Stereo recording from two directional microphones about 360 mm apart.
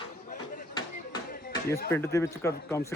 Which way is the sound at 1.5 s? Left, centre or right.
Centre.